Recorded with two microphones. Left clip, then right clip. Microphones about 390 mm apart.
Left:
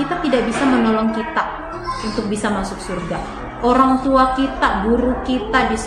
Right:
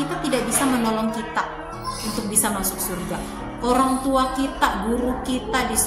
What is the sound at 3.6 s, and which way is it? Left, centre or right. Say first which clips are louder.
A woman's voice: left 6 dB; right.